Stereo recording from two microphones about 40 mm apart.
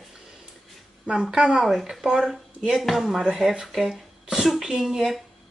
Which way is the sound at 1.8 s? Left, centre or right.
Centre.